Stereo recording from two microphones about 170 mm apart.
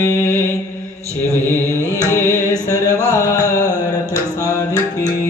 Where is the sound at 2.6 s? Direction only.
20° left (ahead or behind).